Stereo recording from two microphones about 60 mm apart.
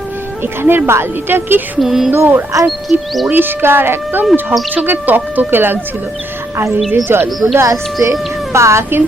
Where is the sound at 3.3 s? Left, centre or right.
Right.